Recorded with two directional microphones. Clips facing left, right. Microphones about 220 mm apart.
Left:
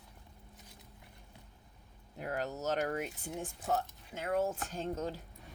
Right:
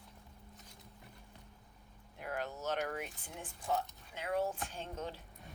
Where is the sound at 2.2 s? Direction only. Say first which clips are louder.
Left 4 dB; 40° left (ahead or behind).